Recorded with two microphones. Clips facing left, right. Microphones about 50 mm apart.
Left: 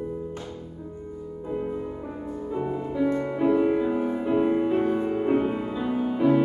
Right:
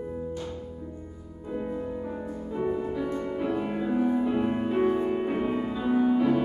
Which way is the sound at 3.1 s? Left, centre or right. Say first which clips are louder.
Left 5 dB; left.